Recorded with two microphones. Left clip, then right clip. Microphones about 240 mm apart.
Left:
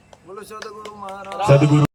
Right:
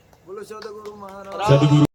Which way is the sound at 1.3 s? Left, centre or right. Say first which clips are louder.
Left 2 dB; centre.